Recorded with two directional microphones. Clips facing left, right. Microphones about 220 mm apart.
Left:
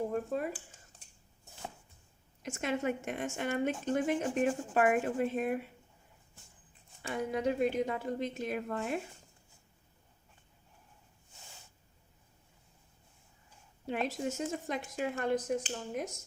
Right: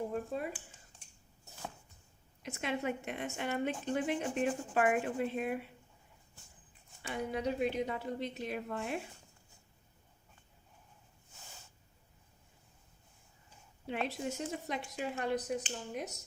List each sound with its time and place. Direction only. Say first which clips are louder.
0.3 s a woman's voice: left 3 dB; 45° left (ahead or behind)
2.4 s a woman's voice: left 3 dB; 45° left (ahead or behind)
7.0 s a woman's voice: left 3 dB; 45° left (ahead or behind)
13.8 s a woman's voice: left 3 dB; 45° left (ahead or behind)